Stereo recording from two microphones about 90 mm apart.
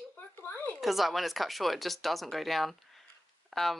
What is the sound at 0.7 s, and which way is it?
Speech, centre (ahead or behind).